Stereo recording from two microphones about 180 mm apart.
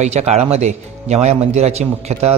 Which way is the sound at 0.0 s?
40° right (ahead or behind).